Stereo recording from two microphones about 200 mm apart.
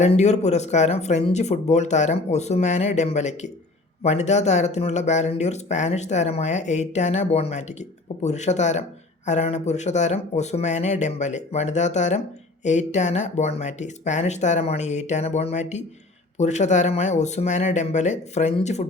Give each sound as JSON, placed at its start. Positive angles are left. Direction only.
{"t": 0.0, "sound": "speech", "side_deg": 35}